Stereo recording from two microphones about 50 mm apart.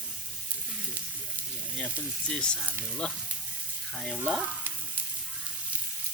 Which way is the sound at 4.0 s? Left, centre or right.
Centre.